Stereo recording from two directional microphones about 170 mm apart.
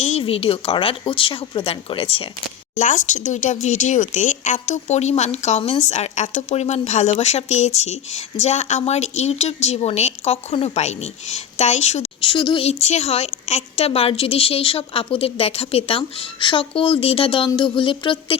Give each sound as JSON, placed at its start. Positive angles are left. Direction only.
{"t": 0.0, "sound": "a woman's voice", "side_deg": 35}
{"t": 2.7, "sound": "a woman's voice", "side_deg": 50}